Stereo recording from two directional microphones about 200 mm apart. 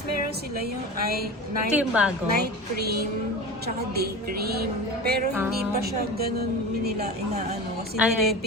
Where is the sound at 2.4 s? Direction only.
50° right (ahead or behind).